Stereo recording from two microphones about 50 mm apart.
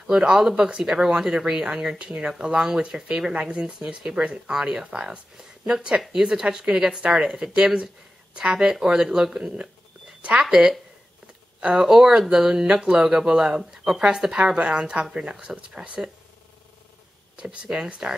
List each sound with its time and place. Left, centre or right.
0.0 s speech: centre
17.4 s speech: centre